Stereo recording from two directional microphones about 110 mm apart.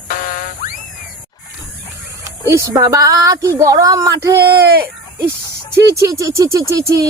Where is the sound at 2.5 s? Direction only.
30° right (ahead or behind).